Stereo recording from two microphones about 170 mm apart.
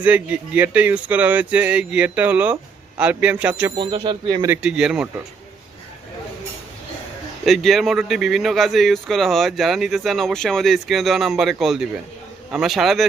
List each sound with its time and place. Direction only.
0.0 s speech: 10° right (ahead or behind)
3.8 s speech: 25° right (ahead or behind)
4.4 s speech: 10° right (ahead or behind)
7.4 s speech: centre (ahead or behind)